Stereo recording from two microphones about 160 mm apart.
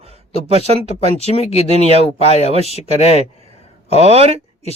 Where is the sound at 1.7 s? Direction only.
40° right (ahead or behind).